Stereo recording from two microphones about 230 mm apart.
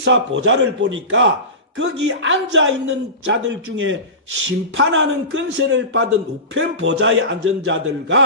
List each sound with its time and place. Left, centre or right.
0.0 s a man's voice: right